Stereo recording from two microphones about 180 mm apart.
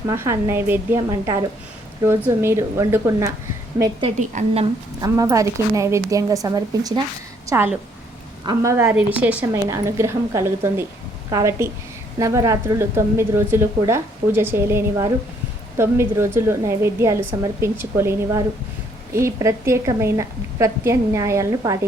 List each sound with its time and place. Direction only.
0.1 s a woman's voice: 15° right (ahead or behind)
4.2 s a woman's voice: 45° right (ahead or behind)
4.9 s a woman's voice: 20° right (ahead or behind)